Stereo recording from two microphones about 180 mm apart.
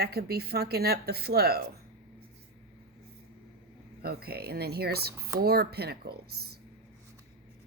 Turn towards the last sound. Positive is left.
turn(degrees=-60)  # may be behind; listen again after turning